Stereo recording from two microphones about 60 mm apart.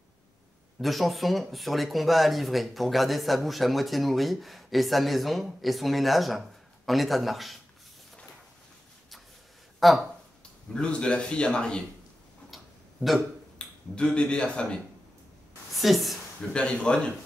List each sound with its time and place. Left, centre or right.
0.7 s speech: centre
9.8 s speech: centre
10.7 s speech: centre
12.4 s tick-tock: centre
13.6 s speech: centre
15.7 s a woman's voice: centre
16.5 s speech: centre